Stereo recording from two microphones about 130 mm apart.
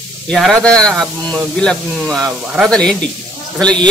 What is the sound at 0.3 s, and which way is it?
A man's voice, 5° left (ahead or behind).